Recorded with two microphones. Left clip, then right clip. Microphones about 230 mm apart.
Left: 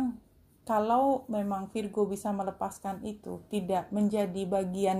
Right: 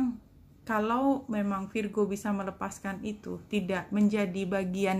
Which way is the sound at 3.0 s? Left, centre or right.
Centre.